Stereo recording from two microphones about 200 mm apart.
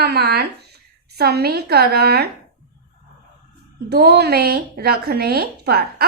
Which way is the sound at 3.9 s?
55° right (ahead or behind).